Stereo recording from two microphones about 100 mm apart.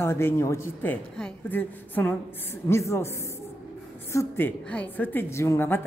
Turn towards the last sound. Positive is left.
turn(degrees=25)  # may be behind; listen again after turning